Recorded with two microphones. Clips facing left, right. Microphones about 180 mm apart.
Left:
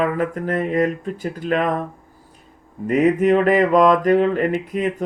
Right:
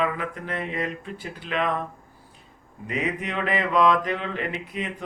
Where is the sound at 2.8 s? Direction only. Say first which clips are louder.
Left 13 dB; 45° left (ahead or behind).